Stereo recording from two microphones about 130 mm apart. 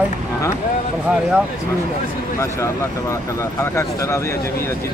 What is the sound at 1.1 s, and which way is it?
Speech, 5° right (ahead or behind).